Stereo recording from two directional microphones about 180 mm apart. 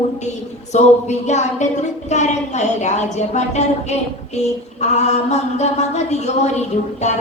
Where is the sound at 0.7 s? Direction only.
40° left (ahead or behind).